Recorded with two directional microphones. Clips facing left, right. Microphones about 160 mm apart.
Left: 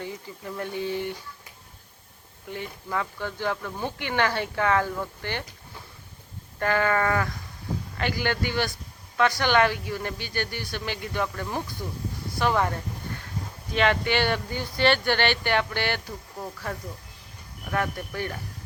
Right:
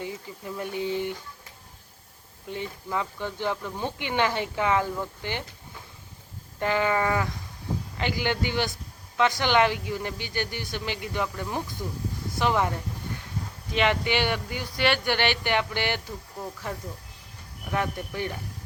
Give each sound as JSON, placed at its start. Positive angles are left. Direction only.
{"t": 0.0, "sound": "speech", "side_deg": -15}
{"t": 2.5, "sound": "speech", "side_deg": -20}
{"t": 6.6, "sound": "speech", "side_deg": -15}
{"t": 13.7, "sound": "speech", "side_deg": -15}
{"t": 14.5, "sound": "speech", "side_deg": 35}
{"t": 14.8, "sound": "speech", "side_deg": -10}
{"t": 17.7, "sound": "speech", "side_deg": -15}